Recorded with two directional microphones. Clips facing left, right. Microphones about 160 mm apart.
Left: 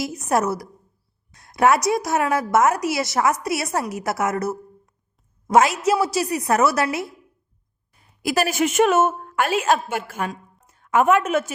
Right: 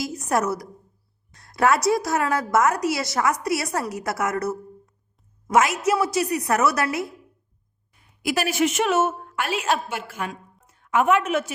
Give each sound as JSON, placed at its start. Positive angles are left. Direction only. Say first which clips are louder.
{"t": 0.0, "sound": "a woman's voice", "louder": "left 2 dB", "side_deg": 25}
{"t": 1.4, "sound": "a sound", "louder": "left 3 dB", "side_deg": 20}
{"t": 1.9, "sound": "a woman's voice", "louder": "left 1 dB", "side_deg": 20}
{"t": 7.9, "sound": "a woman's voice", "louder": "left 3 dB", "side_deg": 40}